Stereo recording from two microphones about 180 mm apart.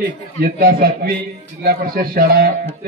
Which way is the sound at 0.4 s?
55° right (ahead or behind).